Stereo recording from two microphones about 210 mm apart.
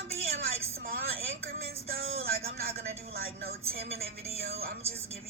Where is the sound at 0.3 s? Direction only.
45° right (ahead or behind).